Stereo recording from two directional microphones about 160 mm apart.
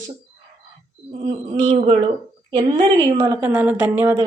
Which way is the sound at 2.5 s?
30° right (ahead or behind).